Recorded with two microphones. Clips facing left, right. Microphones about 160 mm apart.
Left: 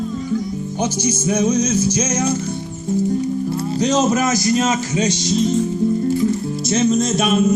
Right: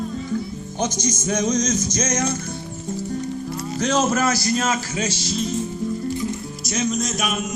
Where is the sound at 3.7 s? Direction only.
15° left (ahead or behind).